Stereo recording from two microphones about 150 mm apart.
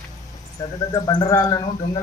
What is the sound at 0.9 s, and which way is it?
Speech, 25° left (ahead or behind).